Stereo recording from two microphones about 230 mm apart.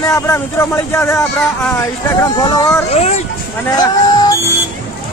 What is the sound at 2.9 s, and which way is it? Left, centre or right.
Speech, left.